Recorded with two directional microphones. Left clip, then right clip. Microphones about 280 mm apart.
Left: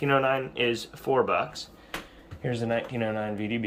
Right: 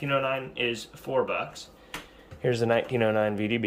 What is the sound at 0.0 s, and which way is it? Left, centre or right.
Speech, centre.